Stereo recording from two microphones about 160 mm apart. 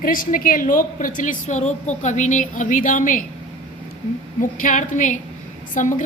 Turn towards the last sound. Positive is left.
turn(degrees=55)  # may be behind; listen again after turning